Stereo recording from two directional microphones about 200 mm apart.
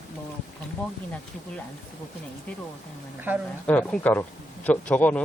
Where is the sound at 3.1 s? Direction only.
10° right (ahead or behind).